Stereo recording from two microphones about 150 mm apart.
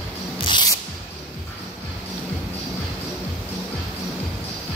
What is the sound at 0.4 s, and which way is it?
Music, 30° left (ahead or behind).